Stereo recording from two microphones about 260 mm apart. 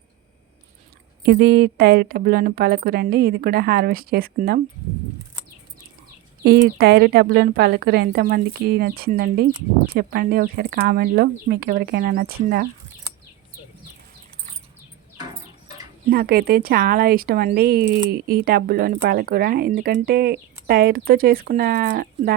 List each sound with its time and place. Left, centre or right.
1.2 s speech: right
6.4 s speech: right
16.0 s speech: right